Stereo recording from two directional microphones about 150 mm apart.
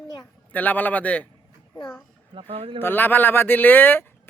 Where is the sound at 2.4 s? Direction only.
40° right (ahead or behind).